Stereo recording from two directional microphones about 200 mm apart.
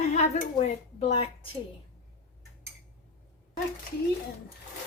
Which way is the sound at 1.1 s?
30° left (ahead or behind).